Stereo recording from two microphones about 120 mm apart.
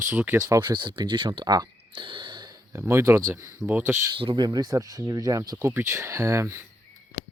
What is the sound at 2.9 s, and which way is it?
Speech, 25° right (ahead or behind).